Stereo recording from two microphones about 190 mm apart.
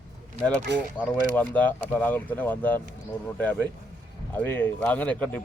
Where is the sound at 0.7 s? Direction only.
65° right (ahead or behind).